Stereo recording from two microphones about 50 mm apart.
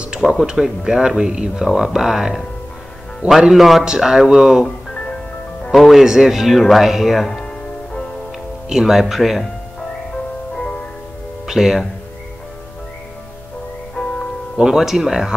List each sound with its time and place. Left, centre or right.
0.2 s speech: centre
1.6 s speech: centre
4.9 s music: left
5.8 s speech: centre
7.4 s music: centre
8.6 s speech: centre
11.4 s speech: centre
14.0 s music: centre
14.6 s speech: centre